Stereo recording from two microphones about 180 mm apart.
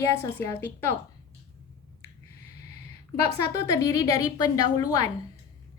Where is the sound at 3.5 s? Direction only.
15° left (ahead or behind).